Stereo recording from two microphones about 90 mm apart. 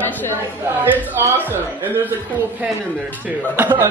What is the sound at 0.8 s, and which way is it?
A man's voice, 20° right (ahead or behind).